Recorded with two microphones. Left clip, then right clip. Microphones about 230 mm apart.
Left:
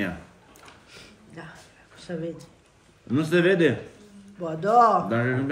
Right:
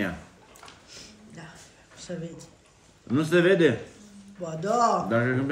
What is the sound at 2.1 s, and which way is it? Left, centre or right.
Speech, left.